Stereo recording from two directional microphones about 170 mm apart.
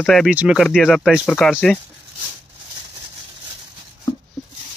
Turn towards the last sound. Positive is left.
turn(degrees=0)  # may be behind; listen again after turning